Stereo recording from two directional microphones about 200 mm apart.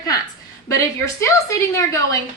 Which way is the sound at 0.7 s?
15° left (ahead or behind).